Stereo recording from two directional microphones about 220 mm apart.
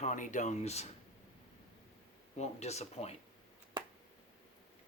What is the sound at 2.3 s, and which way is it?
Speech, 30° left (ahead or behind).